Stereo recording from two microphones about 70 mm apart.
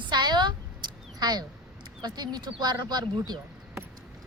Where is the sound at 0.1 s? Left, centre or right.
Right.